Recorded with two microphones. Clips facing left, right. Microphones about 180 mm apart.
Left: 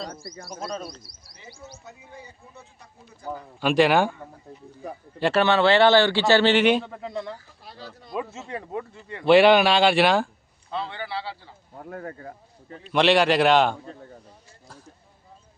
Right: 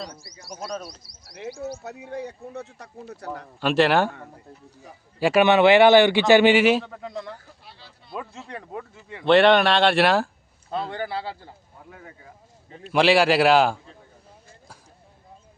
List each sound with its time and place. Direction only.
0.1 s speech: 55° left (ahead or behind)
1.4 s speech: 70° right (ahead or behind)
3.8 s a man's voice: 10° left (ahead or behind)
5.2 s a man's voice: 15° right (ahead or behind)
7.6 s a sound: 40° left (ahead or behind)
8.1 s speech: 5° left (ahead or behind)
10.7 s speech: 45° right (ahead or behind)
11.8 s speech: 50° left (ahead or behind)
12.9 s speech: 5° right (ahead or behind)